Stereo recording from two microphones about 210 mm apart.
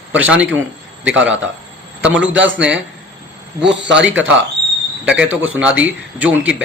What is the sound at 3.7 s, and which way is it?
Speech, 60° right (ahead or behind).